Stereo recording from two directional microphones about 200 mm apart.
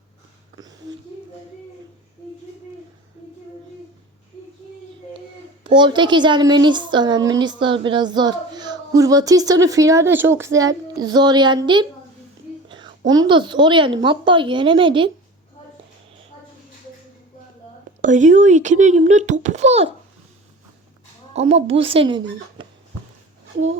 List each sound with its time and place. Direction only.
5.6 s speech: 25° right (ahead or behind)
18.0 s a child's voice: 40° right (ahead or behind)
21.5 s speech: 30° right (ahead or behind)